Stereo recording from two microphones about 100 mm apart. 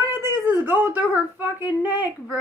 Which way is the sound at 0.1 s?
25° right (ahead or behind).